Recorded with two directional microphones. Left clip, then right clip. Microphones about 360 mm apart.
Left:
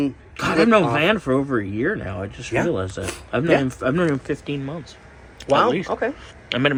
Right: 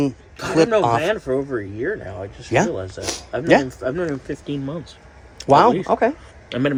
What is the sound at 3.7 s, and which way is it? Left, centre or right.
Speech, centre.